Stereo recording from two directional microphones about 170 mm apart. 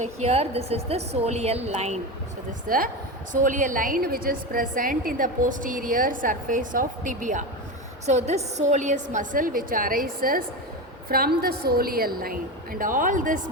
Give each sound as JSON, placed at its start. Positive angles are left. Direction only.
{"t": 0.0, "sound": "a woman's voice", "side_deg": -40}
{"t": 2.6, "sound": "a woman's voice", "side_deg": -55}